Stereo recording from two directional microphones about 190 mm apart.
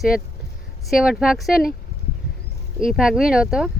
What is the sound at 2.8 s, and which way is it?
Speech, 5° right (ahead or behind).